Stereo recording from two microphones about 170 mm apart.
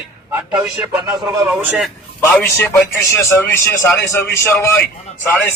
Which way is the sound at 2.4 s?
15° left (ahead or behind).